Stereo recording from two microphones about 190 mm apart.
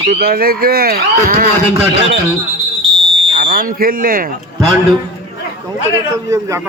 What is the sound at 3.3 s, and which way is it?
Speech, 55° right (ahead or behind).